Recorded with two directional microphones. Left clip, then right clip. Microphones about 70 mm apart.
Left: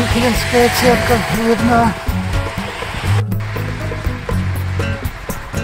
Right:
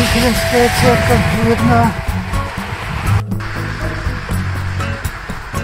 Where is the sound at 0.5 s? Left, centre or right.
Centre.